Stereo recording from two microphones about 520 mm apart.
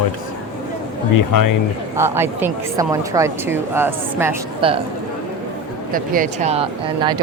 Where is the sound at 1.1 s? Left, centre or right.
Left.